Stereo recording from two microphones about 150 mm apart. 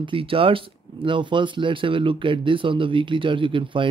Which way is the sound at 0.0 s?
35° right (ahead or behind).